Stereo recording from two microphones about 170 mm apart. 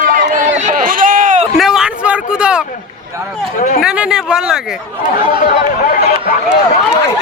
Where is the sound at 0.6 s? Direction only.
50° right (ahead or behind).